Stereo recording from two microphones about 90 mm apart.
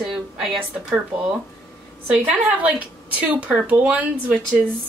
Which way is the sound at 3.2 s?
15° right (ahead or behind).